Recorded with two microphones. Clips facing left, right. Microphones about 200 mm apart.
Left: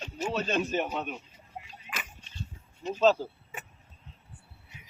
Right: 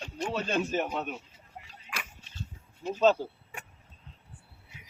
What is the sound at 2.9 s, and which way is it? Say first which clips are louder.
Speech: even; 5° right (ahead or behind).